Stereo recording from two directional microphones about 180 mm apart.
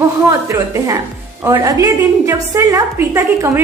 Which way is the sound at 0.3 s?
20° right (ahead or behind).